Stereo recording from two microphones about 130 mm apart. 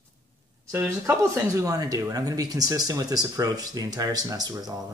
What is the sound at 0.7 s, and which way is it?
Speech, 15° right (ahead or behind).